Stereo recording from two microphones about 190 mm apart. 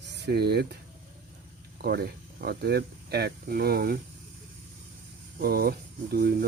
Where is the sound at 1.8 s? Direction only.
55° right (ahead or behind).